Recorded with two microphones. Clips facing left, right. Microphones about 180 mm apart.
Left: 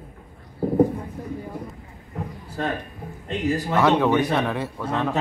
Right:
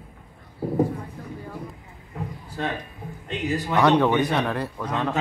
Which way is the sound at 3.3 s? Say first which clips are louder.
Left 3 dB; 35° left (ahead or behind).